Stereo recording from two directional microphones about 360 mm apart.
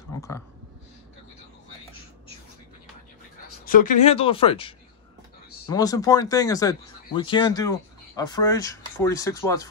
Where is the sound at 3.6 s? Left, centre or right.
Left.